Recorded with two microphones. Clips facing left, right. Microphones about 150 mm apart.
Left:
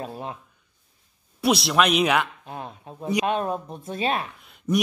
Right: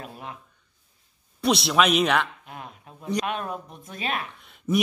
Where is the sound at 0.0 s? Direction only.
30° left (ahead or behind).